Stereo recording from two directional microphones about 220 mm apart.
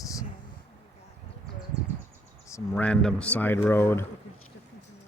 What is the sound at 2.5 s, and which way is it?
Speech, 10° left (ahead or behind).